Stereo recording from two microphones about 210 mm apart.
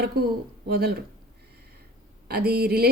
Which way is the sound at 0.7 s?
50° right (ahead or behind).